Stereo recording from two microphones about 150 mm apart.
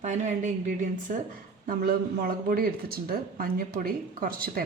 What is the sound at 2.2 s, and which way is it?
Speech, 75° right (ahead or behind).